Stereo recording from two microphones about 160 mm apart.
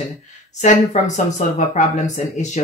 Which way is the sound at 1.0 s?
45° left (ahead or behind).